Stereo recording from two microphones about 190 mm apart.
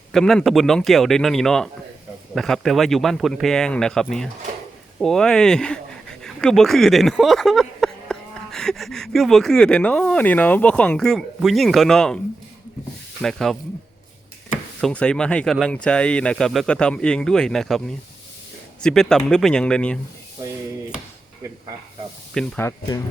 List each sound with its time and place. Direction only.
0.1 s speech: centre (ahead or behind)
13.2 s speech: centre (ahead or behind)
14.8 s speech: 5° left (ahead or behind)
22.4 s speech: 10° left (ahead or behind)